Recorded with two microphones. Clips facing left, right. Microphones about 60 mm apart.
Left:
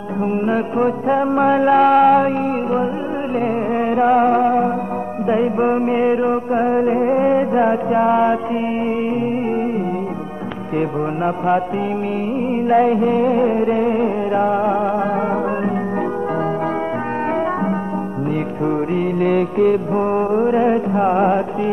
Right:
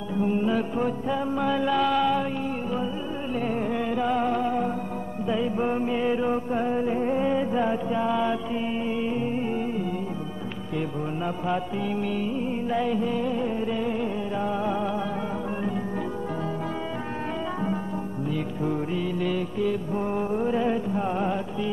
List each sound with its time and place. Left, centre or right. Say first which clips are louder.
0.2 s music: left 6 dB; left
10.8 s mantra: left 10 dB; left
12.6 s music: left 13 dB; left
18.7 s music: left 10 dB; left